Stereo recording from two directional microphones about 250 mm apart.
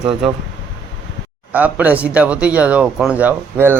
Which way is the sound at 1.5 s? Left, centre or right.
Centre.